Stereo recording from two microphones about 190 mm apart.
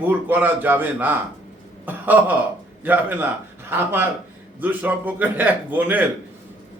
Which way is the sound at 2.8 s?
10° right (ahead or behind).